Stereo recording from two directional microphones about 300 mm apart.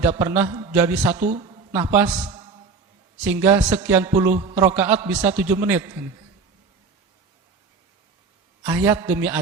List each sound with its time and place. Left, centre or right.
0.2 s music: centre
1.1 s a woman's voice: right
3.2 s music: centre
8.6 s music: centre